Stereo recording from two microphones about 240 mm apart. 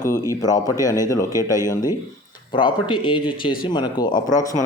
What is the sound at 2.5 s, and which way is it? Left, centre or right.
Speech, centre.